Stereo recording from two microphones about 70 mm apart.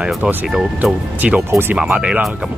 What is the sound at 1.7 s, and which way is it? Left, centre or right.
Speech, centre.